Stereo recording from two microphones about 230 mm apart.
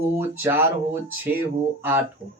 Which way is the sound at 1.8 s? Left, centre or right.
Centre.